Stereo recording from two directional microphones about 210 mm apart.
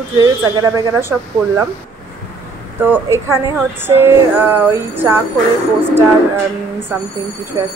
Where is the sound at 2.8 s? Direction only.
10° right (ahead or behind).